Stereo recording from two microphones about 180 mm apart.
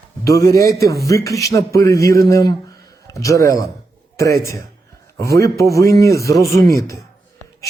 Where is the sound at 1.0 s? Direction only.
20° left (ahead or behind).